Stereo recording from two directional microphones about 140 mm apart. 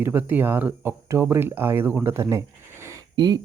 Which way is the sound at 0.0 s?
15° right (ahead or behind).